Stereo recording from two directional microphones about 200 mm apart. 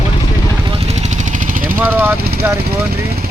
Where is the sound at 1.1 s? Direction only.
40° right (ahead or behind).